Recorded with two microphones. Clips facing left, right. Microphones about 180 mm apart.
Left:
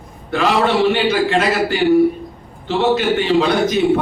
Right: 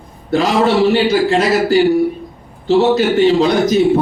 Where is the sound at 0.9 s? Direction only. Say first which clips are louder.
Right 3 dB; 40° right (ahead or behind).